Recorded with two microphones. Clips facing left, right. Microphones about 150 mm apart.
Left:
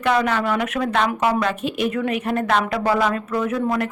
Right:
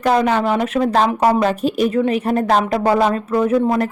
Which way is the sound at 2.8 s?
25° right (ahead or behind).